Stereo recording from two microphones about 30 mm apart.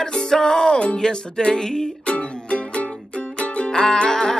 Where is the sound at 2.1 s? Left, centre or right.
Left.